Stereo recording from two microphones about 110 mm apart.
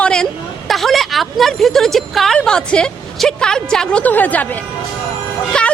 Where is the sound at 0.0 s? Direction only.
5° left (ahead or behind).